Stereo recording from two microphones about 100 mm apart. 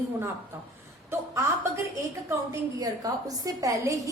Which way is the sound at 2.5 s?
35° right (ahead or behind).